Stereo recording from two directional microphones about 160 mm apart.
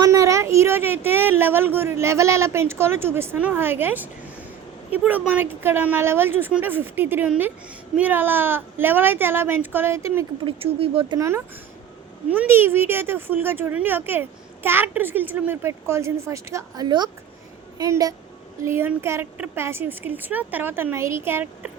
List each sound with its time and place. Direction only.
0.0 s a woman's voice: 20° right (ahead or behind)
10.4 s speech: 35° right (ahead or behind)
11.2 s a woman's voice: 15° right (ahead or behind)